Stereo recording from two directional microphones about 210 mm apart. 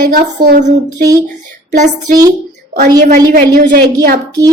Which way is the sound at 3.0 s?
40° right (ahead or behind).